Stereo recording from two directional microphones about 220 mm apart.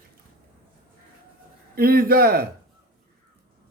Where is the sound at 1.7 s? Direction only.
45° right (ahead or behind).